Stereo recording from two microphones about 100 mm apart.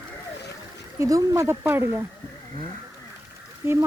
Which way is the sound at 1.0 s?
30° right (ahead or behind).